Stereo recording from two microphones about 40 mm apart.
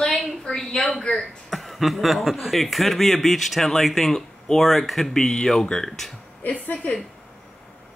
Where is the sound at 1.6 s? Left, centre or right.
Centre.